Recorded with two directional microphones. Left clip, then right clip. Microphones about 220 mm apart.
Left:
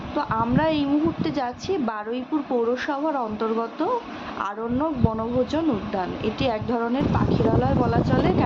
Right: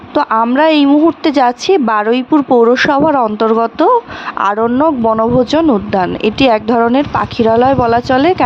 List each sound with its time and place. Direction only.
0.2 s speech: 50° right (ahead or behind)